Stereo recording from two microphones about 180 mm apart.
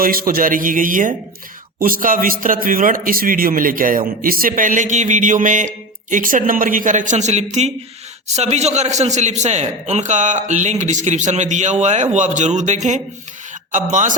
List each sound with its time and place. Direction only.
0.0 s a man's voice: 55° right (ahead or behind)